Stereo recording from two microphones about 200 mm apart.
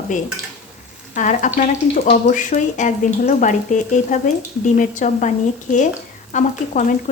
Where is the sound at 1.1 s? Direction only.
40° left (ahead or behind).